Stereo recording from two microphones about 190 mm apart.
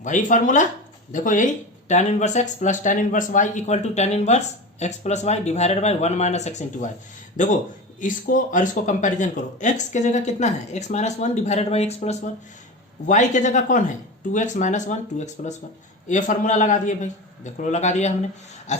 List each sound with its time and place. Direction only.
0.0 s speech: 40° left (ahead or behind)